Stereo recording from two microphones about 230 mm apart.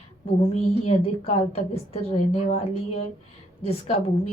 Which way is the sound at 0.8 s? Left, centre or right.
Left.